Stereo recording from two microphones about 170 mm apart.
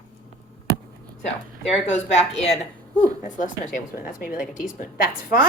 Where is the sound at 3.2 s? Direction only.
50° left (ahead or behind).